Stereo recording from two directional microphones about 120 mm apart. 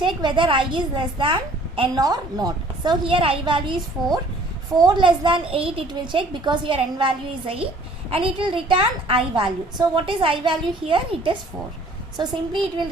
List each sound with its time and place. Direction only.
0.0 s a woman's voice: 40° right (ahead or behind)
2.0 s a woman's voice: 30° right (ahead or behind); by 11.3 s 45° right (ahead or behind)
12.1 s a woman's voice: 35° right (ahead or behind)